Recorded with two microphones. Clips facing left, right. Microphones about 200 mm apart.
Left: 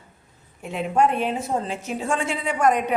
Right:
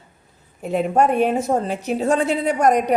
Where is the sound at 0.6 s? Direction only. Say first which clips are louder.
Right 3 dB; 40° right (ahead or behind).